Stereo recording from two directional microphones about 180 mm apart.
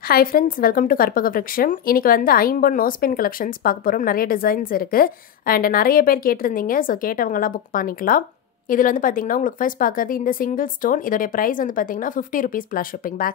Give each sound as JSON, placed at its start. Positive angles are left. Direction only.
{"t": 0.1, "sound": "a woman's voice", "side_deg": 55}